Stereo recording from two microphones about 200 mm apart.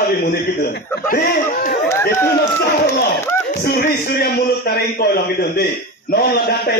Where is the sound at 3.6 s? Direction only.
55° left (ahead or behind).